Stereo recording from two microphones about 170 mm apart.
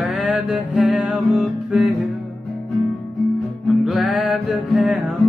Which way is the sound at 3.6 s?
Centre (ahead or behind).